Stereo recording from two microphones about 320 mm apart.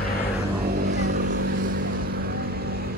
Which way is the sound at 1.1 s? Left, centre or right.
Right.